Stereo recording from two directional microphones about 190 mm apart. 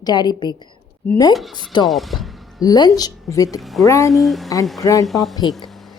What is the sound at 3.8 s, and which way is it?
Speech, 15° left (ahead or behind).